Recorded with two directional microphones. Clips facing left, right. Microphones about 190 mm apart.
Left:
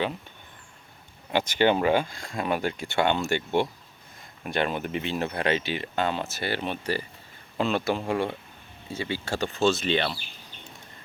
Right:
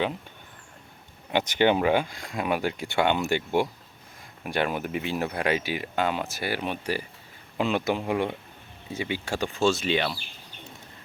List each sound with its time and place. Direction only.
1.3 s speech: 15° right (ahead or behind)